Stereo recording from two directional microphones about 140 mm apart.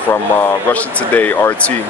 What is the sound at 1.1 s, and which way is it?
Speech, 10° left (ahead or behind).